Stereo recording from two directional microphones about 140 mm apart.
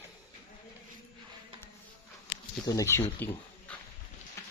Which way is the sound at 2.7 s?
20° left (ahead or behind).